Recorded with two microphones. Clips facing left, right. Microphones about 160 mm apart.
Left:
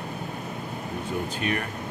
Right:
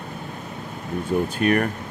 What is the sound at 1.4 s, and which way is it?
Speech, 55° right (ahead or behind).